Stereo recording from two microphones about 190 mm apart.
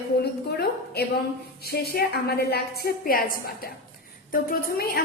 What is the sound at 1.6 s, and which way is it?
A woman's voice, 55° left (ahead or behind).